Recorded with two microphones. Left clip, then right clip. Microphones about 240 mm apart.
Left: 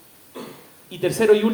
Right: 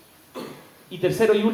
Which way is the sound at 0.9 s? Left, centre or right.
Left.